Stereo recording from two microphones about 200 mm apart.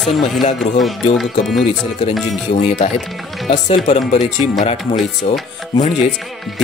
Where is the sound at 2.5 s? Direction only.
35° left (ahead or behind).